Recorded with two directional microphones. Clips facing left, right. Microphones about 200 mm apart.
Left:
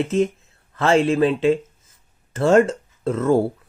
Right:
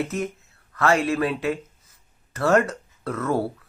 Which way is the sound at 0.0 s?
25° left (ahead or behind).